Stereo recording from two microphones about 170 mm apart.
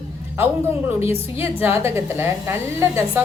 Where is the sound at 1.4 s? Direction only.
15° right (ahead or behind).